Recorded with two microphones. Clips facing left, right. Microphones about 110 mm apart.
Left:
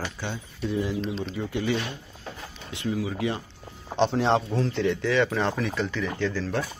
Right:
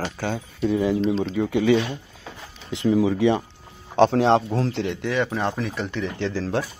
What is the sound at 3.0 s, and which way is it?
Speech, 90° right.